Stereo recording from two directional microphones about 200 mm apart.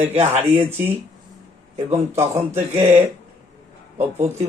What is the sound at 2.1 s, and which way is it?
Speech, 15° right (ahead or behind).